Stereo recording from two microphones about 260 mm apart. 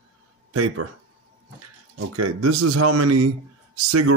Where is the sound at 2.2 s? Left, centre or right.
Right.